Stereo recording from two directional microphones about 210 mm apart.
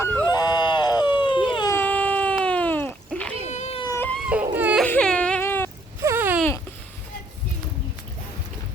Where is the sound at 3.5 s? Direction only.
30° left (ahead or behind).